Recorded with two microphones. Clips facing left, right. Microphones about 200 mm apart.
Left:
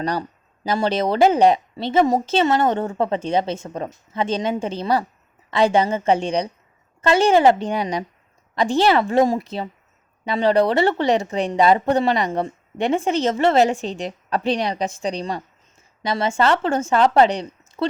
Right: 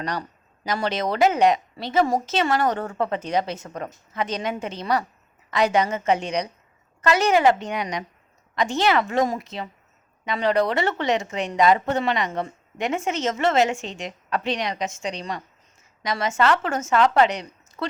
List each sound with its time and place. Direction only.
0.0 s speech: 30° left (ahead or behind)